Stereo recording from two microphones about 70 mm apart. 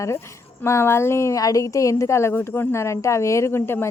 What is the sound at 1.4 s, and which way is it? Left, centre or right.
A woman's voice, left.